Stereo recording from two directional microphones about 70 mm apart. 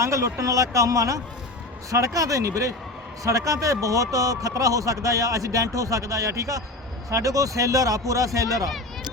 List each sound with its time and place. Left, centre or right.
0.0 s speech: right